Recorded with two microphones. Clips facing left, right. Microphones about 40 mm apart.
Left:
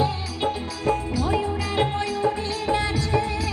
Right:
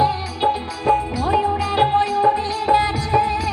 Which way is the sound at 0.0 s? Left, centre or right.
Right.